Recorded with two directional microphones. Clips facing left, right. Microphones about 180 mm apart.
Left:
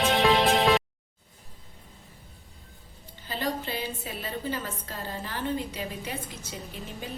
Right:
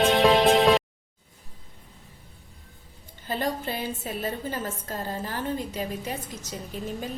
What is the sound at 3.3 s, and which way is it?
A woman's voice, 45° right (ahead or behind).